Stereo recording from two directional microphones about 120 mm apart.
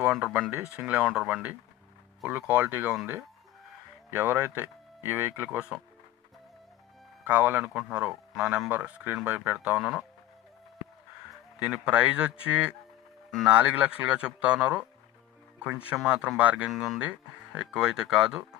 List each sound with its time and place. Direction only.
0.0 s speech: 10° right (ahead or behind)
4.1 s speech: 15° right (ahead or behind)
7.3 s speech: 15° right (ahead or behind)
11.6 s speech: 10° right (ahead or behind)